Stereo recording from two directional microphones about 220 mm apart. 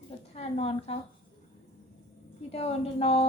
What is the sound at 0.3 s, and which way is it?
Speech, 25° left (ahead or behind).